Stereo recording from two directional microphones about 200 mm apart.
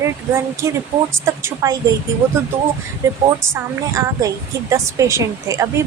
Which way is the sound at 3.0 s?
15° right (ahead or behind).